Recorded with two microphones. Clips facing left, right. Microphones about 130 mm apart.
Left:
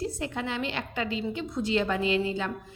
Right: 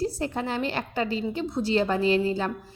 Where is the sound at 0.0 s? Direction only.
35° right (ahead or behind).